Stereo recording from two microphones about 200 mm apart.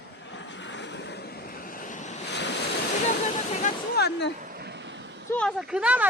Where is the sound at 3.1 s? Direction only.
35° left (ahead or behind).